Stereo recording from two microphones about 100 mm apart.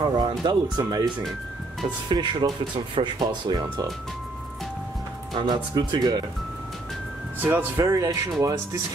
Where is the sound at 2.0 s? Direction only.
45° right (ahead or behind).